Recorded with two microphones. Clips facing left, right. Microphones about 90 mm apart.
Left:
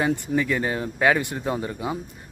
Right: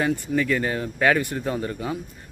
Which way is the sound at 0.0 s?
20° left (ahead or behind).